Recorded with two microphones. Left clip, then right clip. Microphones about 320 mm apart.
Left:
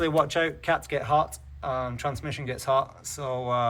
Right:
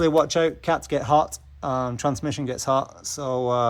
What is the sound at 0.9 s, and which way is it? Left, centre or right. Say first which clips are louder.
Speech: right 4 dB; centre.